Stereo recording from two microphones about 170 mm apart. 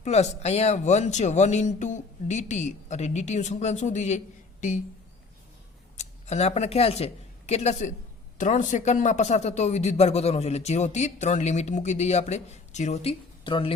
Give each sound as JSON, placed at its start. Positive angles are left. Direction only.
{"t": 0.0, "sound": "speech", "side_deg": 40}
{"t": 6.0, "sound": "a man's voice", "side_deg": 40}